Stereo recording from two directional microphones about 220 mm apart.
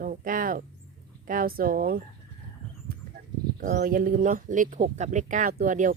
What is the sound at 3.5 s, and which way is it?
Speech, 40° right (ahead or behind).